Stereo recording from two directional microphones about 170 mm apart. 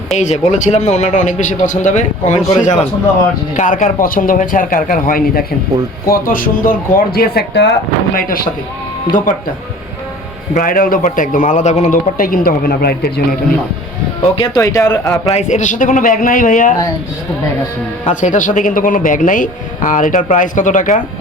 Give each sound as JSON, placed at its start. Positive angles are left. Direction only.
{"t": 0.1, "sound": "a man's voice", "side_deg": 45}
{"t": 10.5, "sound": "a man's voice", "side_deg": 55}
{"t": 14.3, "sound": "speech", "side_deg": 25}
{"t": 15.3, "sound": "a man's voice", "side_deg": 45}
{"t": 18.0, "sound": "a man's voice", "side_deg": 50}